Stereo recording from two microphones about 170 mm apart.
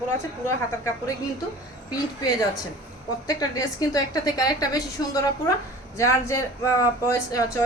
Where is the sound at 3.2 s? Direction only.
20° left (ahead or behind).